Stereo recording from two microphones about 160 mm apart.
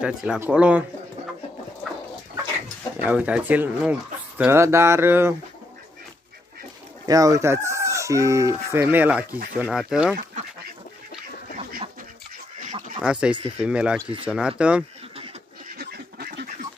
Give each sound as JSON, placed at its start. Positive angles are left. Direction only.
{"t": 0.0, "sound": "speech", "side_deg": -5}
{"t": 3.0, "sound": "speech", "side_deg": -10}
{"t": 7.1, "sound": "chicken", "side_deg": -20}
{"t": 9.6, "sound": "speech", "side_deg": -5}
{"t": 13.0, "sound": "speech", "side_deg": -5}
{"t": 15.8, "sound": "duck", "side_deg": -75}